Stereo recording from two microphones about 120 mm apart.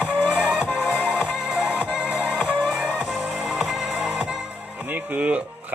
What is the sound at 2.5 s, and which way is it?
Music, 10° left (ahead or behind).